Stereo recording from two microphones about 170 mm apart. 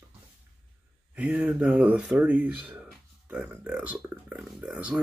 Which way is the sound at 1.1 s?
5° right (ahead or behind).